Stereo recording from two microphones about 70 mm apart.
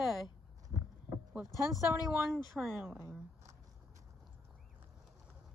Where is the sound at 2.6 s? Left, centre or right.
Centre.